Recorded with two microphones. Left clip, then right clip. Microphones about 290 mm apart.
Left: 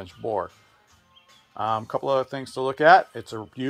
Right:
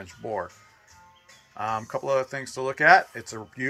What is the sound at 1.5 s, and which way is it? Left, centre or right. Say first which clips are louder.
Speech: left 3 dB; left.